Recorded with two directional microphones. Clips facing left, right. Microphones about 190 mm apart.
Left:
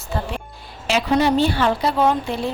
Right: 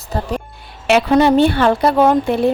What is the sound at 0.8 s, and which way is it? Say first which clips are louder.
Speech: right 6 dB; 60° right (ahead or behind).